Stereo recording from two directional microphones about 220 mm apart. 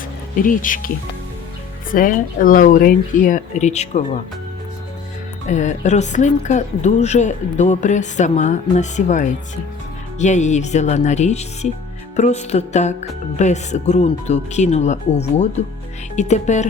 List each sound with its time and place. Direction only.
0.4 s speech: 40° left (ahead or behind)
1.9 s speech: 40° left (ahead or behind)
5.5 s speech: 35° left (ahead or behind)